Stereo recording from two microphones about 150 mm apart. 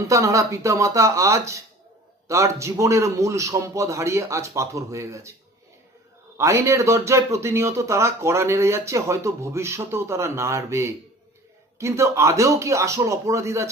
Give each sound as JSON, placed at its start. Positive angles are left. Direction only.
{"t": 0.0, "sound": "a man's voice", "side_deg": -20}
{"t": 6.3, "sound": "a man's voice", "side_deg": -20}